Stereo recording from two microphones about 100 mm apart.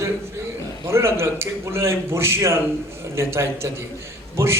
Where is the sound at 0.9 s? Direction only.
25° right (ahead or behind).